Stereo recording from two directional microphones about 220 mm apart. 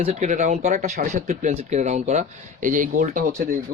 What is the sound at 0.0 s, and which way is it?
Speech, 35° right (ahead or behind).